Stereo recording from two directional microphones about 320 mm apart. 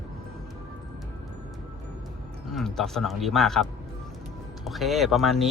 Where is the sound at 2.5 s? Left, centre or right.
Centre.